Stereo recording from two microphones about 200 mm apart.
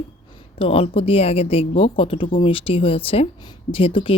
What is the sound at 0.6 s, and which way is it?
A woman's voice, 30° left (ahead or behind).